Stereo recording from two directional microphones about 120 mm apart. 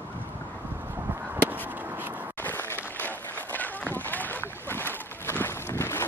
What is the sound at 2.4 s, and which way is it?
Run, 15° left (ahead or behind).